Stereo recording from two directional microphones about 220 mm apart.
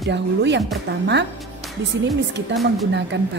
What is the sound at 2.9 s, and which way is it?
Speech, 55° right (ahead or behind).